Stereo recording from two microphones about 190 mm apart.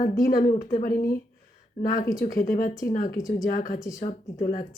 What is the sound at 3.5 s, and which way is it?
Speech, 45° left (ahead or behind).